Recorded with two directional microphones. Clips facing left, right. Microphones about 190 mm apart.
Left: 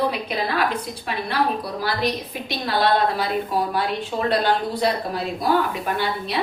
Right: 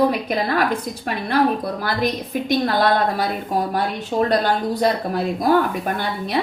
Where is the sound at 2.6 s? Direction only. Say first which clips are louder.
Left 1 dB; 50° right (ahead or behind).